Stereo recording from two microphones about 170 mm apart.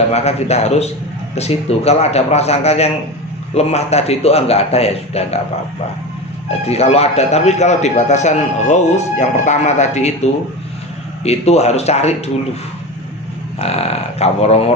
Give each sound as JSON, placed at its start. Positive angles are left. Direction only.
{"t": 0.1, "sound": "a man's voice", "side_deg": 40}
{"t": 6.7, "sound": "a man's voice", "side_deg": 35}
{"t": 11.2, "sound": "a man's voice", "side_deg": 40}
{"t": 13.6, "sound": "a man's voice", "side_deg": 35}